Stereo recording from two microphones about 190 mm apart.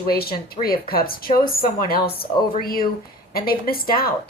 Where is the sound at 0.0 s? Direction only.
55° left (ahead or behind).